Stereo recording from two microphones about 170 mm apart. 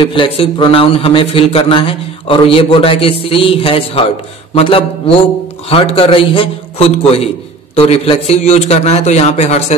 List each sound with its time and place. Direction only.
0.1 s speech: 30° left (ahead or behind)